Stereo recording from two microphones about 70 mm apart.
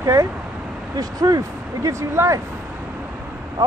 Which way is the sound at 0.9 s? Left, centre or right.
Right.